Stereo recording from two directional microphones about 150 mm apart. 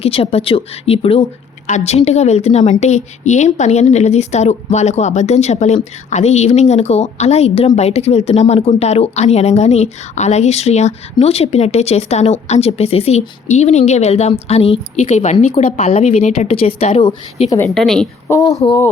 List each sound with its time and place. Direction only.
0.0 s speech: 40° left (ahead or behind)
1.6 s speech: 50° left (ahead or behind)
17.7 s a woman's voice: 5° left (ahead or behind)
18.3 s speech: 20° left (ahead or behind)